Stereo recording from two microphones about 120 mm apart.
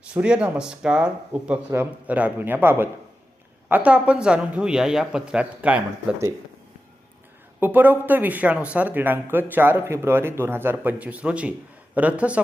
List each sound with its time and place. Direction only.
0.0 s speech: 10° right (ahead or behind)
7.6 s speech: 15° right (ahead or behind)